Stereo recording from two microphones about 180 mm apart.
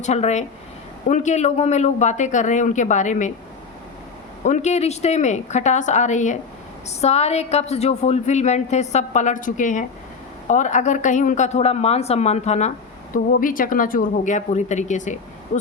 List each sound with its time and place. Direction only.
0.0 s a woman's voice: 40° left (ahead or behind)
4.4 s a woman's voice: 40° left (ahead or behind)
13.1 s speech: 50° left (ahead or behind)